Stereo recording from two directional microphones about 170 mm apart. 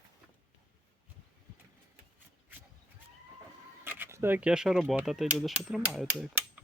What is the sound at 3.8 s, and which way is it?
Speech, 10° right (ahead or behind).